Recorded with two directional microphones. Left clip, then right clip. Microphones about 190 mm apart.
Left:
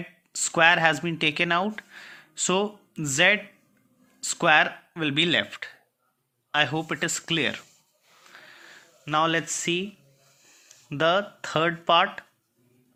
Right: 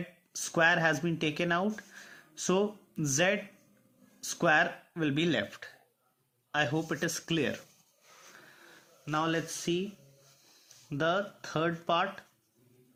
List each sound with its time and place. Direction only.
0.3 s speech: 15° left (ahead or behind)
9.0 s speech: 30° left (ahead or behind)